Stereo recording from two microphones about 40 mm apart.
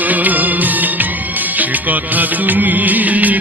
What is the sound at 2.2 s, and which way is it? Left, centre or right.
Music, right.